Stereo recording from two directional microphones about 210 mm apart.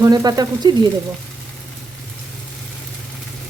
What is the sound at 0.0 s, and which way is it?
Speech, 20° right (ahead or behind).